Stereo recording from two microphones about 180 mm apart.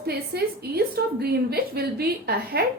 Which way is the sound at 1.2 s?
60° right (ahead or behind).